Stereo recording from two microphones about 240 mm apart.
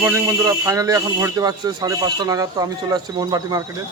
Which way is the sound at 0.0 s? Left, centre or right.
Centre.